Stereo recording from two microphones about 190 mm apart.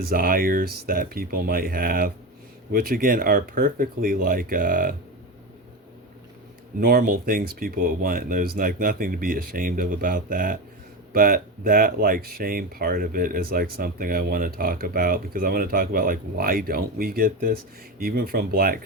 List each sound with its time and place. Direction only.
0.1 s speech: 50° right (ahead or behind)
6.7 s speech: 45° right (ahead or behind)